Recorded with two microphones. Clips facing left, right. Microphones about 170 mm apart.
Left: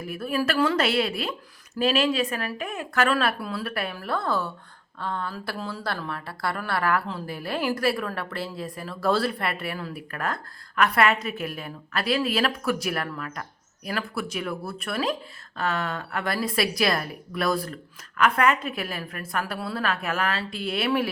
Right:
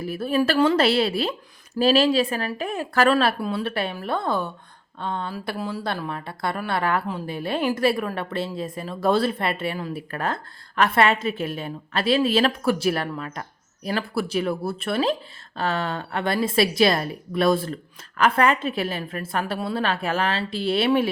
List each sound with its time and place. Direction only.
0.0 s a woman's voice: 30° right (ahead or behind)